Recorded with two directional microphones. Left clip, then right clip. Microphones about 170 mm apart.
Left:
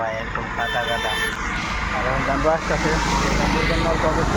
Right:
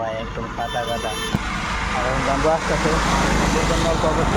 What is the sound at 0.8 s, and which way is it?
Speech, 85° right.